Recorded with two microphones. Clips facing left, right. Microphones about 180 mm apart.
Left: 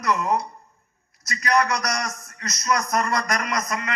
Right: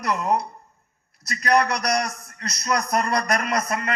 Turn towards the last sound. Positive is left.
turn(degrees=-30)  # may be behind; listen again after turning